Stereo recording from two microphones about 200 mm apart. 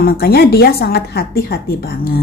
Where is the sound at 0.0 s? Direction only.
50° left (ahead or behind).